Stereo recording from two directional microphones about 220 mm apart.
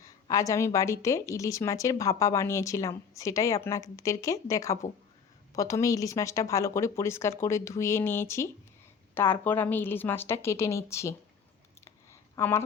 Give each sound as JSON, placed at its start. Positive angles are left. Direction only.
{"t": 0.0, "sound": "a woman's voice", "side_deg": 15}
{"t": 12.4, "sound": "a woman's voice", "side_deg": 10}